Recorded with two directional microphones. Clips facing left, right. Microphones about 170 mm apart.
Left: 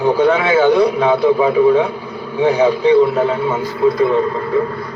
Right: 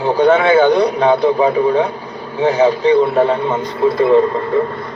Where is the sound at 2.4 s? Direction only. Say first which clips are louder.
Even; 10° left (ahead or behind).